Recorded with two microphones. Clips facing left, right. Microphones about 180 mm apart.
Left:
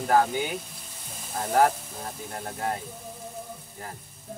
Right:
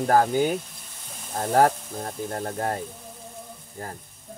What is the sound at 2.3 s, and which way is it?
Speech, 45° right (ahead or behind).